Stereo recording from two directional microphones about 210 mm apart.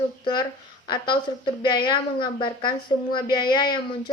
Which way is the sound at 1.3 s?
20° left (ahead or behind).